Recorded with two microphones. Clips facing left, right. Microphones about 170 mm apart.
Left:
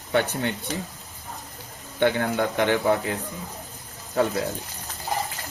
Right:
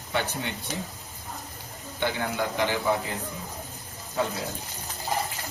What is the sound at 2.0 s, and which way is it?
A man's voice, 55° left (ahead or behind).